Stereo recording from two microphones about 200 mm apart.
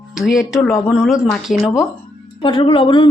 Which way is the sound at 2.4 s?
25° left (ahead or behind).